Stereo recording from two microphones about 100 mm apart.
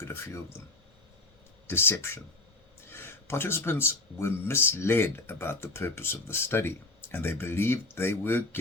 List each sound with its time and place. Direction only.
0.0 s speech: 25° left (ahead or behind)
1.6 s speech: 25° left (ahead or behind)